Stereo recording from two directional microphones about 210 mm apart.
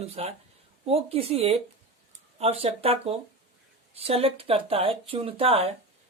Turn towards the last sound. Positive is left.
turn(degrees=-30)  # may be behind; listen again after turning